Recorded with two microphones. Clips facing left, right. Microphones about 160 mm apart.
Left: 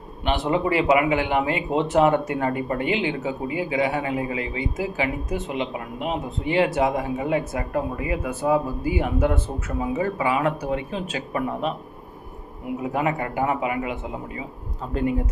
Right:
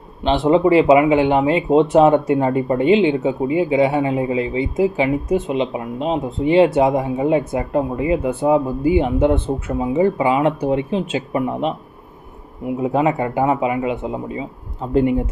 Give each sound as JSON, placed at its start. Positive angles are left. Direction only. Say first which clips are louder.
{"t": 0.3, "sound": "speech", "louder": "right 8 dB", "side_deg": -25}
{"t": 12.8, "sound": "speech", "louder": "right 7 dB", "side_deg": -25}